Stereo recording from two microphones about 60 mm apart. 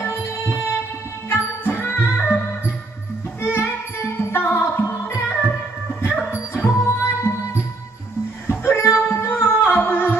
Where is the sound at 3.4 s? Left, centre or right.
Left.